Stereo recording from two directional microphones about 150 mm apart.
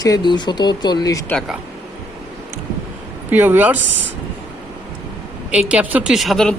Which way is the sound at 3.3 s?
10° right (ahead or behind).